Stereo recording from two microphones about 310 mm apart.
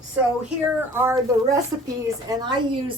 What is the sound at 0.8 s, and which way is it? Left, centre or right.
A woman's voice, centre.